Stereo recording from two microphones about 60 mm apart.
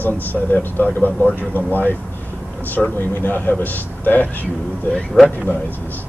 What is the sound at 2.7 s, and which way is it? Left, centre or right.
Speech, left.